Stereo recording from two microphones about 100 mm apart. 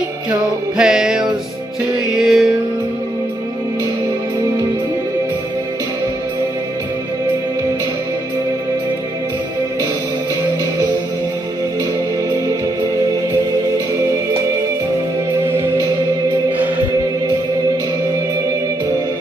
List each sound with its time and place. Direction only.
0.7 s music: 5° right (ahead or behind)
16.4 s music: 15° right (ahead or behind)